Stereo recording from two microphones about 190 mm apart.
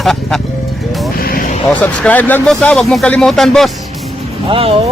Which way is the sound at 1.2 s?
50° left (ahead or behind).